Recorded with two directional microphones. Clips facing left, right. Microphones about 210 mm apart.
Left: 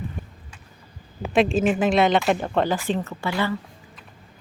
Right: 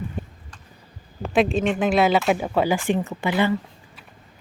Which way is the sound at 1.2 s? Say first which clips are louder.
Left 1 dB; centre (ahead or behind).